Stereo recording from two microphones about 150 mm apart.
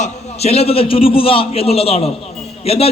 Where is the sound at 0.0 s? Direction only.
45° left (ahead or behind).